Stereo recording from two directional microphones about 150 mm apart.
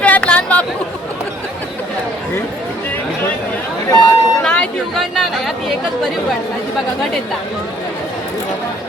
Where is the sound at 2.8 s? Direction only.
10° left (ahead or behind).